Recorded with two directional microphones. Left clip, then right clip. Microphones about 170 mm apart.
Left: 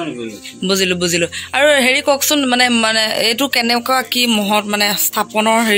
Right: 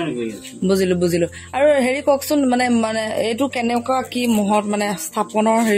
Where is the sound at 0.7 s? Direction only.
20° right (ahead or behind).